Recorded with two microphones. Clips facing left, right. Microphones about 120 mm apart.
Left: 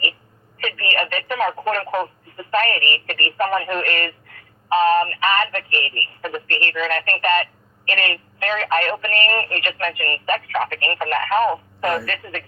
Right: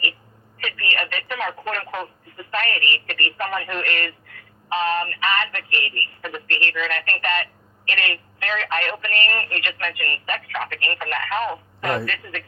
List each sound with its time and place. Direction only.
0.8 s speech: 45° left (ahead or behind)